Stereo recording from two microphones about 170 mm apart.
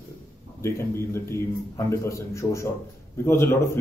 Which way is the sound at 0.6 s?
15° left (ahead or behind).